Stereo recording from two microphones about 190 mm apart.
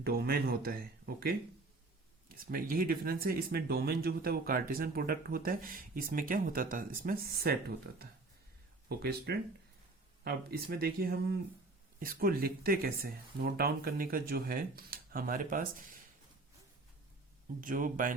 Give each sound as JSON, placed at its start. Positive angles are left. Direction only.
{"t": 0.0, "sound": "speech", "side_deg": -55}
{"t": 8.9, "sound": "speech", "side_deg": -55}
{"t": 17.6, "sound": "speech", "side_deg": -45}